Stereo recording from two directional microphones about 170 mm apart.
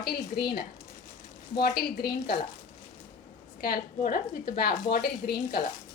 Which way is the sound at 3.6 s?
55° left (ahead or behind).